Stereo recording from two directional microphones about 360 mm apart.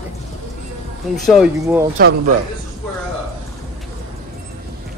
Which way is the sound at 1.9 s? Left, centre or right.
Right.